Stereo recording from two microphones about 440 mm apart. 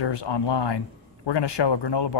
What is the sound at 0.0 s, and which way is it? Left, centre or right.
Speech, left.